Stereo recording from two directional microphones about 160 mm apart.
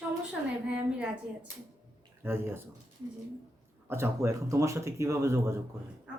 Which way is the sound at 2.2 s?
15° right (ahead or behind).